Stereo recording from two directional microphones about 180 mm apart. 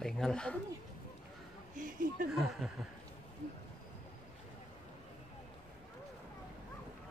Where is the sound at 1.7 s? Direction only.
50° right (ahead or behind).